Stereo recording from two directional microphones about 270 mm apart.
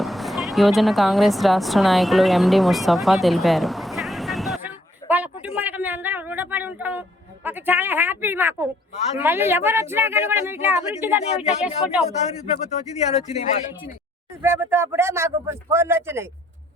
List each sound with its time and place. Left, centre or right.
0.0 s a sound: centre
7.4 s speech: centre
11.2 s speech: left
11.6 s speech: centre
14.4 s speech: centre